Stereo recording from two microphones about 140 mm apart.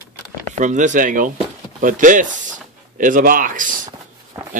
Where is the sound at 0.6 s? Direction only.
60° right (ahead or behind).